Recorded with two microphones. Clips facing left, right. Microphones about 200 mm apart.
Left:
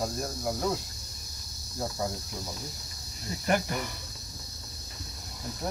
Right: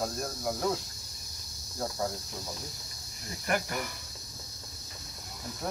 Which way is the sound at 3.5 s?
25° left (ahead or behind).